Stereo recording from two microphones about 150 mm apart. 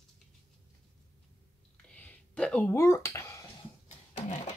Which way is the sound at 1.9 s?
10° left (ahead or behind).